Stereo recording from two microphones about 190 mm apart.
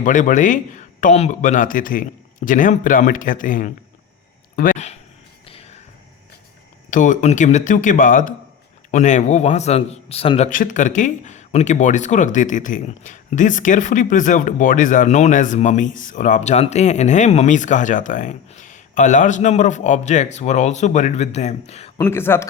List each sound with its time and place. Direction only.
0.0 s speech: 40° left (ahead or behind)
6.9 s a man's voice: 40° left (ahead or behind)
21.9 s speech: 10° left (ahead or behind)